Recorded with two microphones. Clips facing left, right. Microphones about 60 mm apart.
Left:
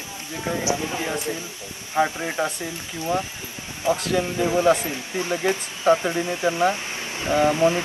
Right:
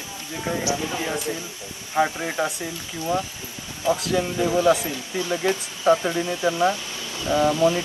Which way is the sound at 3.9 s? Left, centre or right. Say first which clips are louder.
Even; left.